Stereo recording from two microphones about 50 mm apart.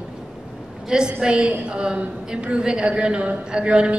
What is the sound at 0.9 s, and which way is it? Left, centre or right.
A woman's voice, centre.